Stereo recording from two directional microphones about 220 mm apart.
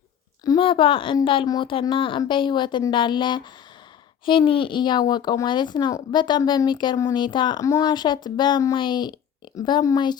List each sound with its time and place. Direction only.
0.4 s speech: 20° left (ahead or behind)